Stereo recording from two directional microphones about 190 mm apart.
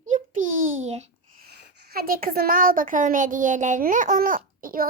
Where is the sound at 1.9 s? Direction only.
50° right (ahead or behind).